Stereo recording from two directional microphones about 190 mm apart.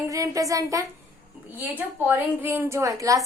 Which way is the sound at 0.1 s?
15° right (ahead or behind).